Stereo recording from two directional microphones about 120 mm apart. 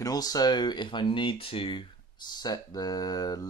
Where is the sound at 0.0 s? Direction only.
30° left (ahead or behind).